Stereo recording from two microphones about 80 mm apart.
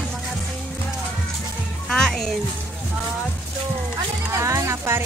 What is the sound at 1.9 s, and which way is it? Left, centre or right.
Speech, centre.